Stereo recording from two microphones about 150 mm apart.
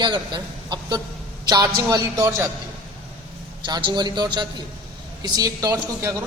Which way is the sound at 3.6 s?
30° right (ahead or behind).